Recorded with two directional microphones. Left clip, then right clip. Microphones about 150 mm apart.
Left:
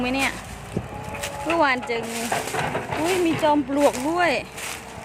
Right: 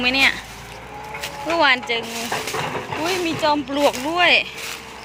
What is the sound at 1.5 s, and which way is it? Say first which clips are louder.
Speech: right 4 dB; 20° left (ahead or behind).